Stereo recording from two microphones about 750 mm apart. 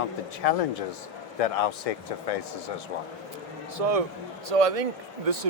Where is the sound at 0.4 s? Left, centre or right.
Left.